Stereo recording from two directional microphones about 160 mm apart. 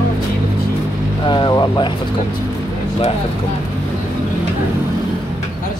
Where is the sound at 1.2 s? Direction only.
30° left (ahead or behind).